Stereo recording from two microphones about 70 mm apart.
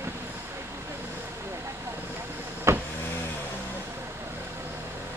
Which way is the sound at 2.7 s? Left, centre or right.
Right.